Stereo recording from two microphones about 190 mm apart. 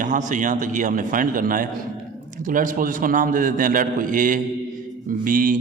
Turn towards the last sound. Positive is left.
turn(degrees=-45)  # may be behind; listen again after turning